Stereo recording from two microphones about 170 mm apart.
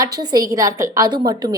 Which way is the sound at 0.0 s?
25° right (ahead or behind).